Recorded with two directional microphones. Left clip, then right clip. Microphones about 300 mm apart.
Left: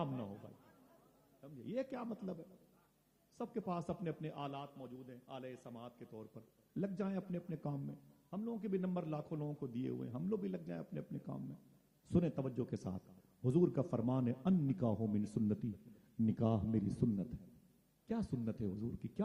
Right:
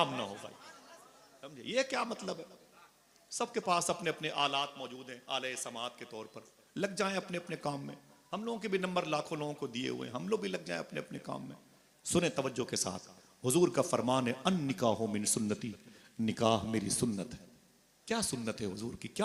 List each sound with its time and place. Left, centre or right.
0.0 s a man's voice: centre
0.3 s chatter: centre
1.4 s a man's voice: centre
12.9 s a man's voice: centre
13.4 s a man's voice: centre